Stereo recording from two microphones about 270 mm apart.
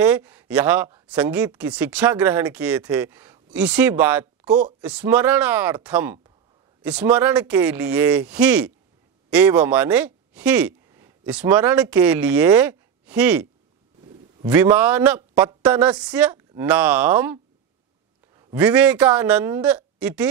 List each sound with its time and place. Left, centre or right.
0.0 s speech: centre
4.5 s speech: right
4.8 s a woman's voice: centre
14.5 s a woman's voice: centre